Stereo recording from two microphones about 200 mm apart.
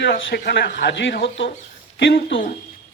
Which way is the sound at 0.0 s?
55° left (ahead or behind).